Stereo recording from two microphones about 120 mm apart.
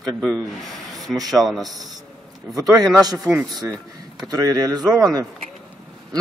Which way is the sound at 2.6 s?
30° right (ahead or behind).